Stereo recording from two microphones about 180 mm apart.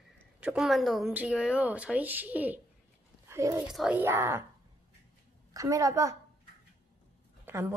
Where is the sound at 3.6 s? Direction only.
5° right (ahead or behind).